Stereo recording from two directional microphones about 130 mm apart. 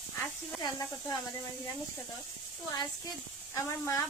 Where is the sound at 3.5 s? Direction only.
20° left (ahead or behind).